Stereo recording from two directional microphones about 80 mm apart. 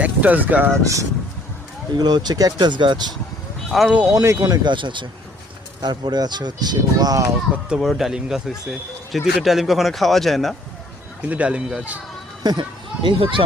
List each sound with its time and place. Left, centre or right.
0.0 s speech: centre
0.8 s speech: right
2.0 s speech: right
3.7 s a man's voice: centre
4.1 s speech: right
4.7 s speech: right
5.8 s speech: right
7.8 s a man's voice: centre
11.2 s speech: centre
12.4 s speech: right